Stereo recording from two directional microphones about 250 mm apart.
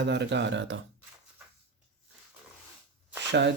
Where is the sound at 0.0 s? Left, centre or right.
Right.